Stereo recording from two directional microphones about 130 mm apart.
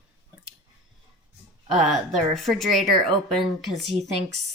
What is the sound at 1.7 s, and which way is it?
Speech, centre (ahead or behind).